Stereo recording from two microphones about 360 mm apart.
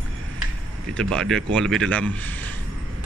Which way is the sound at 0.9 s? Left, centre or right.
Centre.